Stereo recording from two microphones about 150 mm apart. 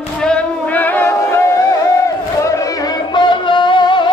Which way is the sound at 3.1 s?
30° left (ahead or behind).